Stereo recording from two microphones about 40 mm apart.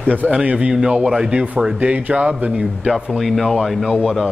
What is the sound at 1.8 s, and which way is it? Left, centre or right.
Speech, right.